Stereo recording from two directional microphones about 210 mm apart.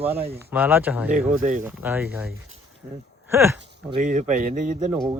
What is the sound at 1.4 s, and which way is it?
Speech, 40° right (ahead or behind).